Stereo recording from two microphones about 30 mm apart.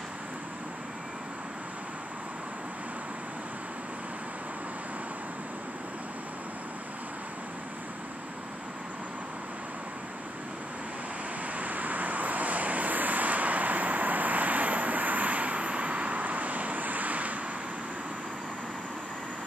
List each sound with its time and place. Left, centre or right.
11.5 s vehicle: right